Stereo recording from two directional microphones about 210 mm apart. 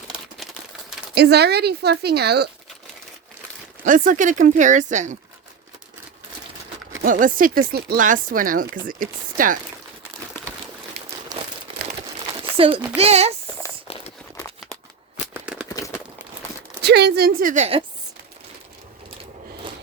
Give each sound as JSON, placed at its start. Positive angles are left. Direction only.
{"t": 1.1, "sound": "speech", "side_deg": -50}
{"t": 3.8, "sound": "speech", "side_deg": -40}
{"t": 7.0, "sound": "speech", "side_deg": -40}
{"t": 11.3, "sound": "crumpling", "side_deg": -20}
{"t": 12.4, "sound": "a sound", "side_deg": -25}
{"t": 13.0, "sound": "speech", "side_deg": -30}
{"t": 15.3, "sound": "a sound", "side_deg": -5}
{"t": 15.7, "sound": "crumpling", "side_deg": 15}
{"t": 16.8, "sound": "speech", "side_deg": -50}